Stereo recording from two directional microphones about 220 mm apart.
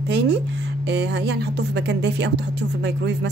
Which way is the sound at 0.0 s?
50° right (ahead or behind).